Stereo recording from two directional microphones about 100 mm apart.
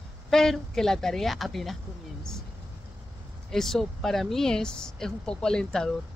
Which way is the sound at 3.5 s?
5° left (ahead or behind).